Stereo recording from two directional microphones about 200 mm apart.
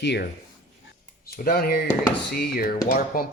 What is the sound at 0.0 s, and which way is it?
Speech, 60° left (ahead or behind).